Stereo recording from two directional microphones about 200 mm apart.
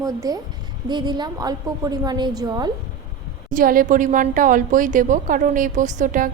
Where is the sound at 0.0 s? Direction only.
20° right (ahead or behind).